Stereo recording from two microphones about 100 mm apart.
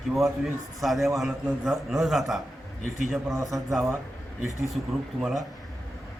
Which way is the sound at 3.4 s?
Centre (ahead or behind).